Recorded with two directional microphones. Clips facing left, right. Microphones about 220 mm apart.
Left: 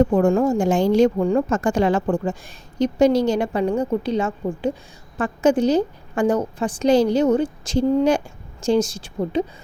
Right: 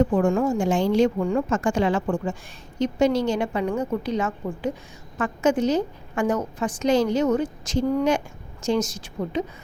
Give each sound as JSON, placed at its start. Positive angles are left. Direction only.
{"t": 0.0, "sound": "speech", "side_deg": 35}